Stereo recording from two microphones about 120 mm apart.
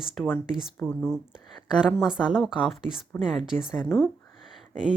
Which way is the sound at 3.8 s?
15° left (ahead or behind).